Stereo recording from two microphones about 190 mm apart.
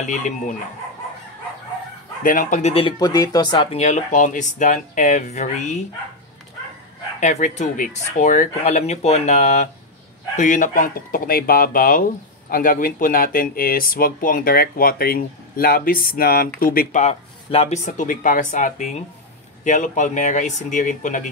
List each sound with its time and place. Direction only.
0.0 s speech: 40° left (ahead or behind)
2.2 s speech: 40° left (ahead or behind); by 3.8 s 25° left (ahead or behind)
3.8 s speech: 40° left (ahead or behind)
7.2 s speech: 40° left (ahead or behind)